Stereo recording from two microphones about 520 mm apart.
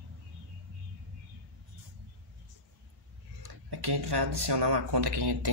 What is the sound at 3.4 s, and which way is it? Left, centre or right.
Speech, right.